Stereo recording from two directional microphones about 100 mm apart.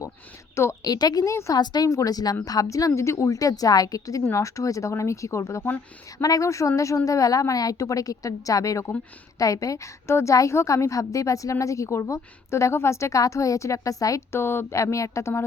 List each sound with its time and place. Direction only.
0.5 s a woman's voice: 30° left (ahead or behind)
0.9 s a woman's voice: 40° left (ahead or behind)
1.5 s a woman's voice: 45° left (ahead or behind)
5.6 s speech: 20° left (ahead or behind)
6.2 s a woman's voice: 35° left (ahead or behind)